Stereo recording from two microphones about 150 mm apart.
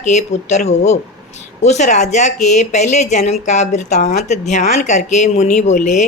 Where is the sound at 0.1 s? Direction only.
50° left (ahead or behind).